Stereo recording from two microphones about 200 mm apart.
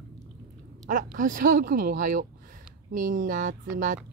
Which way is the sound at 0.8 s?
40° right (ahead or behind).